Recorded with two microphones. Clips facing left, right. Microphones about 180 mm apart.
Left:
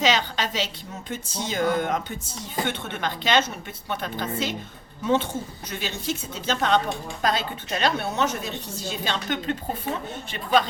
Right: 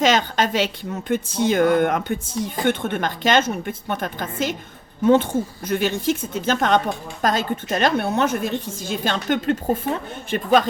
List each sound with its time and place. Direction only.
0.0 s a woman's voice: 50° right (ahead or behind)